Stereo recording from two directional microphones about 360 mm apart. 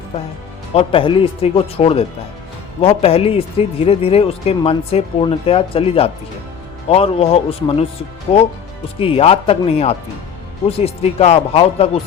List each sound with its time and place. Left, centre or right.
0.7 s speech: centre